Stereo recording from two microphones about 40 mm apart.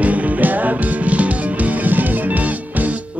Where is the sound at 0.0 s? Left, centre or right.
Right.